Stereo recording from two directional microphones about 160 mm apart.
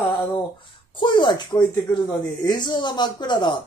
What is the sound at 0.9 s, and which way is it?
Speech, 30° left (ahead or behind).